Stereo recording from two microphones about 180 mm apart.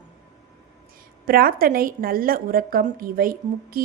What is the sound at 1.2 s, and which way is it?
A woman's voice, 55° right (ahead or behind).